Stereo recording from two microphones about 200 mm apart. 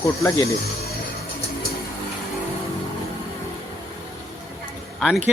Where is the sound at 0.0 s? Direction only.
15° left (ahead or behind).